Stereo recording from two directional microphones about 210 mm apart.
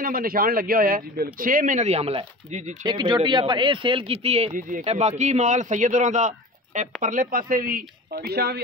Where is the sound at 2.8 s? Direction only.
20° right (ahead or behind).